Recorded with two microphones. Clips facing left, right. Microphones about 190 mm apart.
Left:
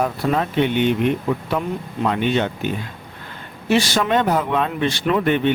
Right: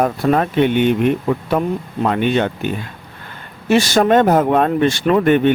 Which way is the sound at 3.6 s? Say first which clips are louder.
Right 5 dB; 45° right (ahead or behind).